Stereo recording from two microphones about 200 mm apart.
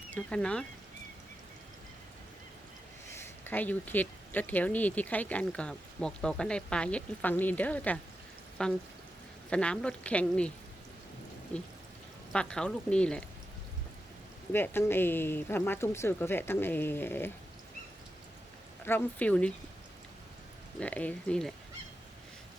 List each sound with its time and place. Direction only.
0.1 s speech: 5° left (ahead or behind)
3.2 s speech: 10° left (ahead or behind)
11.5 s speech: 5° left (ahead or behind)
14.5 s speech: 10° left (ahead or behind)
18.9 s speech: 10° left (ahead or behind)
20.7 s speech: 5° left (ahead or behind)